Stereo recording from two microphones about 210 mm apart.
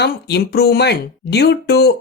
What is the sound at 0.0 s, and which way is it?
Speech, 50° left (ahead or behind).